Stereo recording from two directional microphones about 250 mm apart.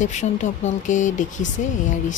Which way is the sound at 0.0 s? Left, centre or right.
Left.